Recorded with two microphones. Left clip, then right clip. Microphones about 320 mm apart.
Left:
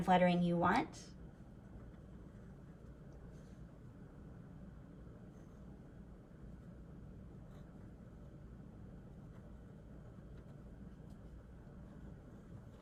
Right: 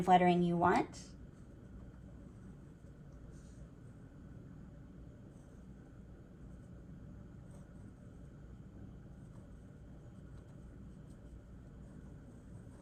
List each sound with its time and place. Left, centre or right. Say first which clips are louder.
0.0 s speech: right 4 dB; centre